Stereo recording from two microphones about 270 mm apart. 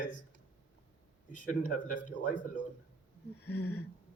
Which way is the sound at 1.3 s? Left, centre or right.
Left.